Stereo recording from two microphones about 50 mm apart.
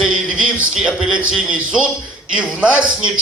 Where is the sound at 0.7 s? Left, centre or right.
Centre.